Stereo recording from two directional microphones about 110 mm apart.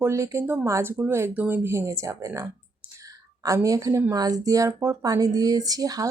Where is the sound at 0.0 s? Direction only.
25° right (ahead or behind).